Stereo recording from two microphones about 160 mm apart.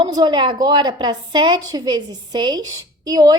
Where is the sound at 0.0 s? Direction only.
25° right (ahead or behind).